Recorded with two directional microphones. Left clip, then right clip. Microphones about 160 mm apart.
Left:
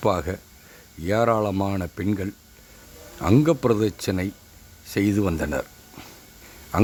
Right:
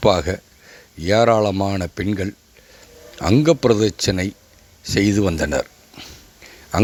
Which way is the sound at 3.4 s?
25° right (ahead or behind).